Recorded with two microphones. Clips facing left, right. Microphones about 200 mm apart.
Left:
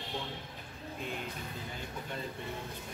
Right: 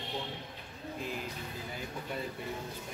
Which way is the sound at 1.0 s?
Centre (ahead or behind).